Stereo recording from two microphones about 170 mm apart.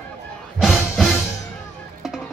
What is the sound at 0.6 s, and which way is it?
Music, centre (ahead or behind).